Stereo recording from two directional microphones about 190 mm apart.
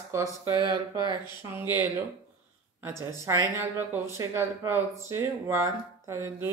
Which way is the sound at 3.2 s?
15° right (ahead or behind).